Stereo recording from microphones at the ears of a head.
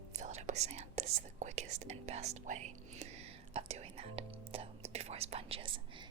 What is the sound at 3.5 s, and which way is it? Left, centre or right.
Whispering, right.